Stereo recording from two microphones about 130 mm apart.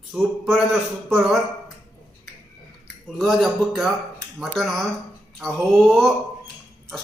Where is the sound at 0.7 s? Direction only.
Centre (ahead or behind).